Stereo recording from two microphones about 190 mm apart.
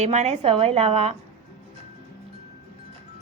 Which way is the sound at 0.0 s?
35° right (ahead or behind).